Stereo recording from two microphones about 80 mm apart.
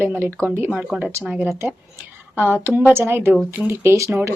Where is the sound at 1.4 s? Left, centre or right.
Right.